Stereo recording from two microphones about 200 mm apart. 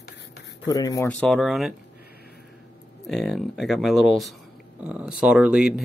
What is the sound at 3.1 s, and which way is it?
Speech, centre (ahead or behind).